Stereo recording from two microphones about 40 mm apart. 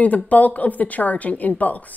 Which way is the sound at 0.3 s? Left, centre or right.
Left.